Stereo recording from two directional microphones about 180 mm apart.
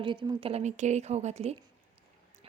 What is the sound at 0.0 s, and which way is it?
A woman's voice, 25° right (ahead or behind).